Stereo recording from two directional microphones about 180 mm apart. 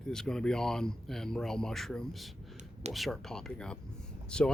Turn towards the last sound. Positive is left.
turn(degrees=5)  # may be behind; listen again after turning